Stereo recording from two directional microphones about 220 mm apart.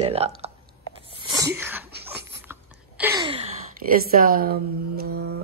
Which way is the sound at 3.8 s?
40° right (ahead or behind).